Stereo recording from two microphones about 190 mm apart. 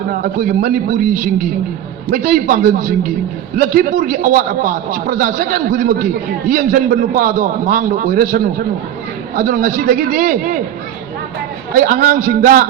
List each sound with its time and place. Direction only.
0.1 s a man's voice: 50° right (ahead or behind)
11.7 s a man's voice: 50° right (ahead or behind)